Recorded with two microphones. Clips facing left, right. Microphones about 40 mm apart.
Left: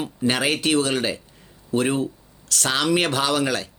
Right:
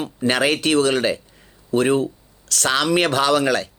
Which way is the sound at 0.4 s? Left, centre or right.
Right.